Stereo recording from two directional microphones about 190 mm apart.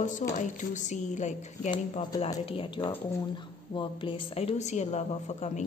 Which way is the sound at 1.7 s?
25° left (ahead or behind).